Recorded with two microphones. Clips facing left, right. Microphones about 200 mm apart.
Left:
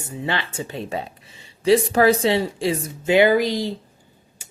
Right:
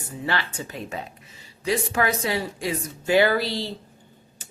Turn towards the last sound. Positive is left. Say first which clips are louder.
# right 1 dB
turn(degrees=10)  # may be behind; listen again after turning